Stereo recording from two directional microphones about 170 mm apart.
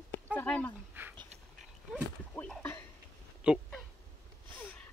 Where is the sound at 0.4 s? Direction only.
10° left (ahead or behind).